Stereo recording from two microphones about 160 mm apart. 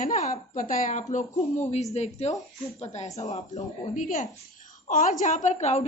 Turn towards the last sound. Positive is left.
turn(degrees=45)  # may be behind; listen again after turning